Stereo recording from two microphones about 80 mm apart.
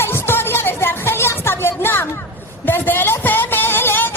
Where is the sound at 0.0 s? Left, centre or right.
Left.